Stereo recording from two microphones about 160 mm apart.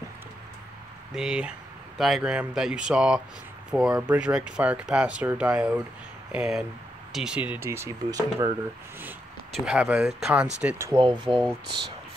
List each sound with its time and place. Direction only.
1.1 s speech: 5° right (ahead or behind); by 8.5 s 20° right (ahead or behind)
9.7 s speech: 5° right (ahead or behind)
10.9 s speech: 30° right (ahead or behind)